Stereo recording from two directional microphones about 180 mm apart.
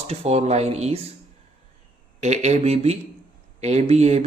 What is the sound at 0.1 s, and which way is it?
Speech, 35° right (ahead or behind).